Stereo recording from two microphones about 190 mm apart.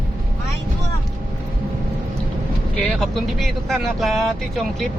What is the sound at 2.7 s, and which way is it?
Speech, centre (ahead or behind).